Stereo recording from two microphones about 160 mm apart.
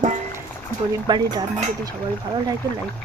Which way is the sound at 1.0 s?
25° right (ahead or behind).